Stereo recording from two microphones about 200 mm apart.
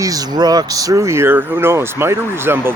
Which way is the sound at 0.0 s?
20° right (ahead or behind).